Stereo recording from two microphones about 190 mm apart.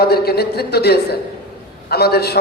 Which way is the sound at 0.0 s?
55° left (ahead or behind).